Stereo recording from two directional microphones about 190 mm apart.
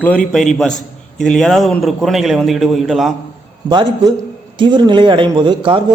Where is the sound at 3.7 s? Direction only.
20° right (ahead or behind).